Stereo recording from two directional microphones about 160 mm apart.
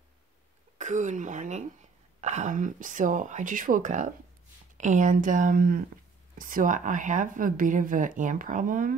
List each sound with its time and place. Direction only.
0.7 s a woman's voice: 50° right (ahead or behind)